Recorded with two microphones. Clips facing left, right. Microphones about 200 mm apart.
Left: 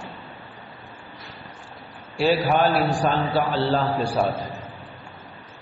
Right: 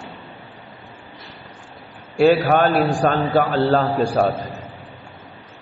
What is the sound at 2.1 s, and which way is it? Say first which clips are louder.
A man's voice: right 6 dB; 50° right (ahead or behind).